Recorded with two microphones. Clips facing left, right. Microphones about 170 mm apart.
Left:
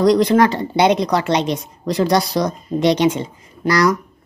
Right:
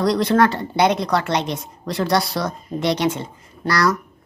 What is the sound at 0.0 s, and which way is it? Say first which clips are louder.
A woman's voice: left 4 dB; 20° left (ahead or behind).